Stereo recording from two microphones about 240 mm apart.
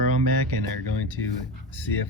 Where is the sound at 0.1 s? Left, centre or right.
Left.